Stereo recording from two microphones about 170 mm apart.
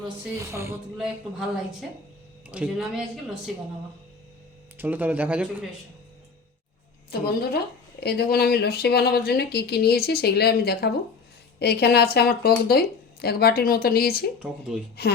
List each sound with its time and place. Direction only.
0.3 s speech: 15° right (ahead or behind)
0.9 s speech: centre (ahead or behind)
2.5 s speech: 5° right (ahead or behind)
4.8 s speech: 10° right (ahead or behind)
7.1 s a woman's voice: 65° left (ahead or behind)
14.3 s speech: 5° right (ahead or behind)
15.0 s speech: 70° left (ahead or behind)